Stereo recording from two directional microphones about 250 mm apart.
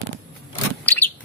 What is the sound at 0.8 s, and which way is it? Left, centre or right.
Vehicle, centre.